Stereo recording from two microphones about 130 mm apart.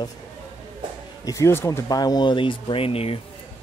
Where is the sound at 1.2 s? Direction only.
25° left (ahead or behind).